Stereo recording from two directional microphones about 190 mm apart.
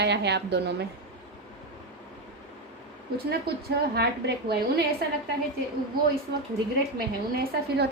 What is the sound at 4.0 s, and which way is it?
Speech, 55° right (ahead or behind).